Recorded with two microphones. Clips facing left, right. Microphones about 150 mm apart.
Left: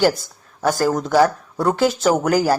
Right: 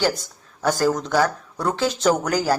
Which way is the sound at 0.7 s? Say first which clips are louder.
Even; 45° left (ahead or behind).